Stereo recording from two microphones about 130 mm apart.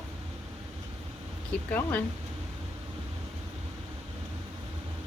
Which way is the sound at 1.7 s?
15° left (ahead or behind).